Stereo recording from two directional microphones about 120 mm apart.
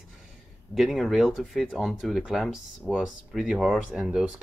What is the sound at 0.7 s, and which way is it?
Speech, centre (ahead or behind).